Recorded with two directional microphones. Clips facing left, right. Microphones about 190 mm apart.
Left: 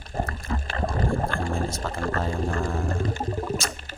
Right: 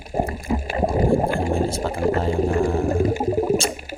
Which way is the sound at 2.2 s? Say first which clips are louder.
Right 7 dB; 25° right (ahead or behind).